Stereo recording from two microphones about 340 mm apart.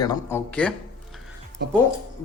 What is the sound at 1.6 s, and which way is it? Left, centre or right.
Speech, right.